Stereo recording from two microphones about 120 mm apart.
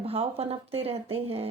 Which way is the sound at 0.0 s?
55° right (ahead or behind).